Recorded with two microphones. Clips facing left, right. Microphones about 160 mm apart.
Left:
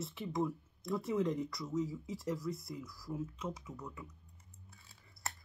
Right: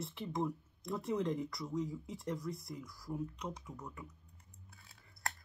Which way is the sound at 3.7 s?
20° right (ahead or behind).